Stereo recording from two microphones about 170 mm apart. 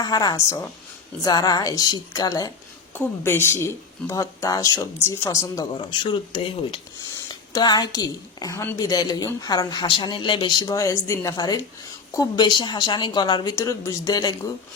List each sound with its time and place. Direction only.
0.0 s a woman's voice: 25° left (ahead or behind)